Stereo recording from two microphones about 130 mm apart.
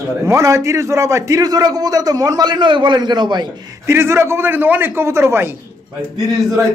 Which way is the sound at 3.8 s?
20° right (ahead or behind).